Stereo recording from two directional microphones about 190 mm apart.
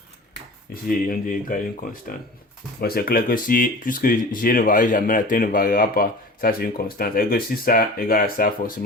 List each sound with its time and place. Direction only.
0.7 s speech: 50° left (ahead or behind)